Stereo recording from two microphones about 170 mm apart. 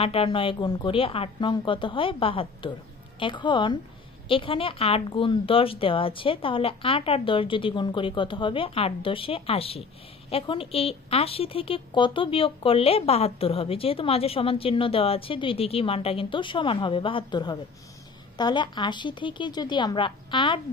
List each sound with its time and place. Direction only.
0.0 s a woman's voice: 35° left (ahead or behind)